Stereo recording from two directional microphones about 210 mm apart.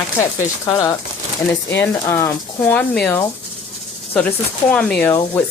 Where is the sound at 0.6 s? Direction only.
15° left (ahead or behind).